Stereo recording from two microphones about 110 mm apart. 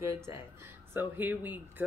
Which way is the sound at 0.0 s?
25° right (ahead or behind).